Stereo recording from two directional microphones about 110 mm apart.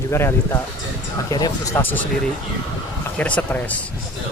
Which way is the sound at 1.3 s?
35° left (ahead or behind).